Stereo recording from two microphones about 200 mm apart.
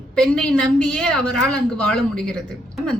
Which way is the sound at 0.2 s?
5° left (ahead or behind).